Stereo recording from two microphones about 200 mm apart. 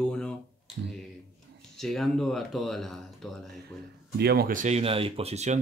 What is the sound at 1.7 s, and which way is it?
Speech, centre (ahead or behind).